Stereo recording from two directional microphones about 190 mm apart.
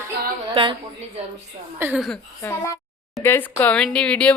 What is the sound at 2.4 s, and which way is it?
A woman's voice, 15° left (ahead or behind).